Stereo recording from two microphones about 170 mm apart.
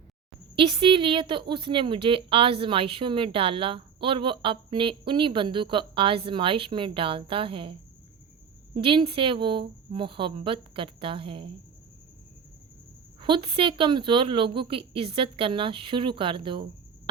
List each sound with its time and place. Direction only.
0.5 s a woman's voice: 35° right (ahead or behind)
13.1 s speech: 30° right (ahead or behind)